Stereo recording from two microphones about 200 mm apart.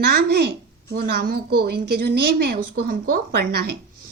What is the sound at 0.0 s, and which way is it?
Speech, 55° right (ahead or behind).